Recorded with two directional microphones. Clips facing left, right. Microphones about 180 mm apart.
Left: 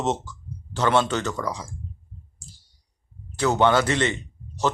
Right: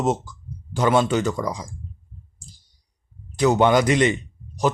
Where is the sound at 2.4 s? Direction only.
15° right (ahead or behind).